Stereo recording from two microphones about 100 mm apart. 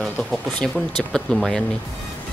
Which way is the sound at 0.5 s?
5° left (ahead or behind).